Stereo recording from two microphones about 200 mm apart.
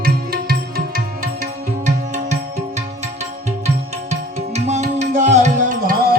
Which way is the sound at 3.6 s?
35° right (ahead or behind).